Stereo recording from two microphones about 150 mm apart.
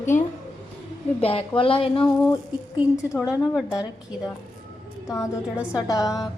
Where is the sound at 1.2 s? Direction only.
35° left (ahead or behind).